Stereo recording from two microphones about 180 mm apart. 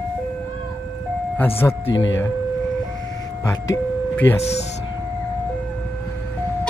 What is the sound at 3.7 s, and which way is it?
Speech, 10° left (ahead or behind).